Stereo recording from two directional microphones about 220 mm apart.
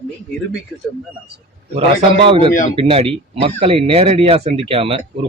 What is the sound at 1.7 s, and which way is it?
Speech, 25° right (ahead or behind).